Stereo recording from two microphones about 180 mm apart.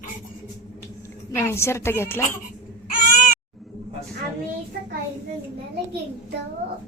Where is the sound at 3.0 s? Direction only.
45° left (ahead or behind).